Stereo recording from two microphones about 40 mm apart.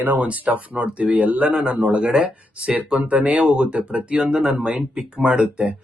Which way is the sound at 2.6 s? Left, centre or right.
Right.